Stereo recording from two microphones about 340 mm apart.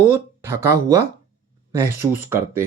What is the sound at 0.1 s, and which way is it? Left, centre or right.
Speech, centre.